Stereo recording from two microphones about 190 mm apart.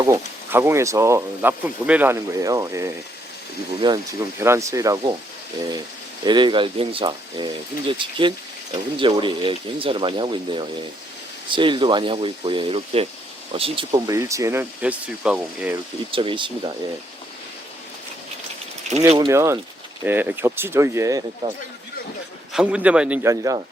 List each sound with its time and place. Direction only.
0.0 s speech: 15° right (ahead or behind)
6.2 s speech: 25° right (ahead or behind)
14.1 s speech: 15° right (ahead or behind)
16.1 s speech: 25° right (ahead or behind)
18.9 s speech: 30° right (ahead or behind)
19.3 s speech: 15° right (ahead or behind)
22.5 s speech: 5° right (ahead or behind)